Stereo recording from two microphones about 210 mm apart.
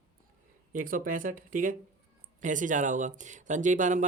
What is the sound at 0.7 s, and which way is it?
Speech, 40° right (ahead or behind).